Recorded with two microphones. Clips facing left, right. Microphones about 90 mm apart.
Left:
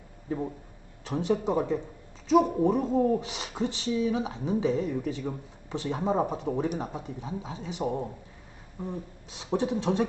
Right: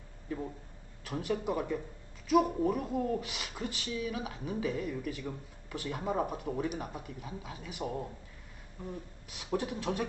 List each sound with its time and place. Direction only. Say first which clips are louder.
1.0 s speech: left 6 dB; 25° left (ahead or behind)